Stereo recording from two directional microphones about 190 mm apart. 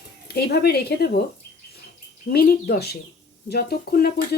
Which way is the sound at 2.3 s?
55° left (ahead or behind).